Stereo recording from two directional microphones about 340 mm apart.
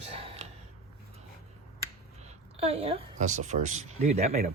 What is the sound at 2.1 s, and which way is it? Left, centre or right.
Speech, centre.